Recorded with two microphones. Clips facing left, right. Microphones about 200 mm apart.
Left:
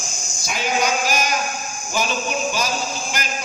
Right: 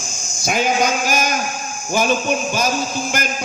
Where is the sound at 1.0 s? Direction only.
50° right (ahead or behind).